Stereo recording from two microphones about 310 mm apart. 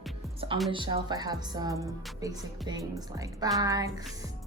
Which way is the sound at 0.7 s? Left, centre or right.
Centre.